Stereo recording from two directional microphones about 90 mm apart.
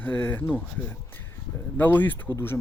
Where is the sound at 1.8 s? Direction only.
20° left (ahead or behind).